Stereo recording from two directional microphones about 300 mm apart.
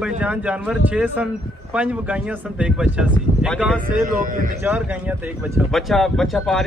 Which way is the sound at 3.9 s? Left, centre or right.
Right.